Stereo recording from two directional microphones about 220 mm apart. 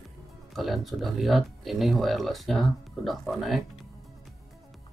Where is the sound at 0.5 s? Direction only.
Centre (ahead or behind).